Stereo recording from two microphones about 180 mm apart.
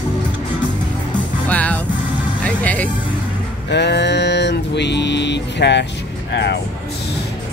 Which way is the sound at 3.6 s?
70° left (ahead or behind).